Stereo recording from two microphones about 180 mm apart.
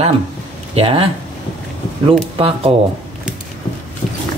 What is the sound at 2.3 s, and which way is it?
Speech, 30° right (ahead or behind).